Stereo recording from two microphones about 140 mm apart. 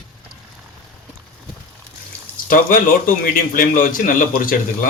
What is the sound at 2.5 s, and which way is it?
A man's voice, 85° left.